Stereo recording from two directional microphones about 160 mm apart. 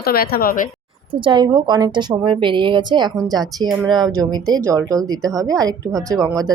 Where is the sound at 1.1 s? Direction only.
30° right (ahead or behind).